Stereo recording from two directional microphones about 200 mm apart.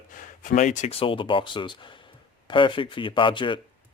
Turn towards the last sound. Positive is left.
turn(degrees=25)  # may be behind; listen again after turning